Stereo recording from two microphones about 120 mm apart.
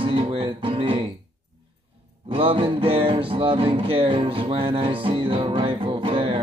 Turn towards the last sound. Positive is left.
turn(degrees=-50)  # may be behind; listen again after turning